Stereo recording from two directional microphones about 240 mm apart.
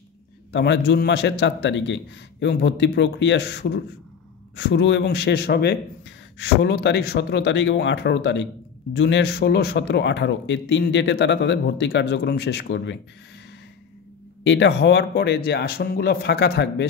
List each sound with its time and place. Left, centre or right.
0.5 s speech: left
14.4 s speech: left